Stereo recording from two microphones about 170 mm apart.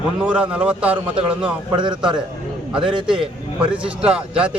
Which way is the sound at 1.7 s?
25° right (ahead or behind).